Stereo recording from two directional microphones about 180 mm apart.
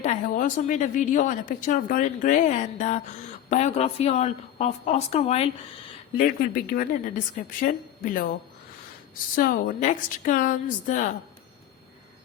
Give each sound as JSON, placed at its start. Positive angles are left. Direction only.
{"t": 0.0, "sound": "a woman's voice", "side_deg": 45}
{"t": 6.1, "sound": "a woman's voice", "side_deg": 50}